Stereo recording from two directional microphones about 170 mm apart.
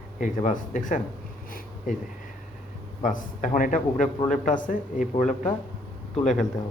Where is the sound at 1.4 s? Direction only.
55° left (ahead or behind).